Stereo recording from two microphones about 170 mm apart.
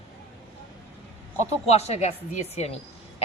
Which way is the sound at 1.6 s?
40° left (ahead or behind).